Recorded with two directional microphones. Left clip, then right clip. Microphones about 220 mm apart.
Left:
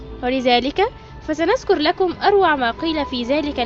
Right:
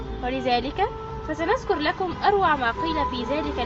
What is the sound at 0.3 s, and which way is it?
Speech, 45° left (ahead or behind).